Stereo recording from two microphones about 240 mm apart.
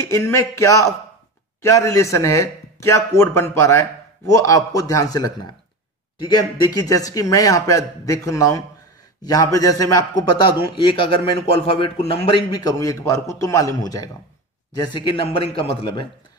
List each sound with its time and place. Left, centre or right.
0.1 s a man's voice: centre